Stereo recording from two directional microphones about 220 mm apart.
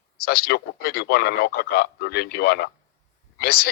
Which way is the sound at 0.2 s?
45° left (ahead or behind).